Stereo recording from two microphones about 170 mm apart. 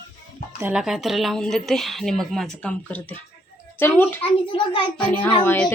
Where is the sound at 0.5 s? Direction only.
10° right (ahead or behind).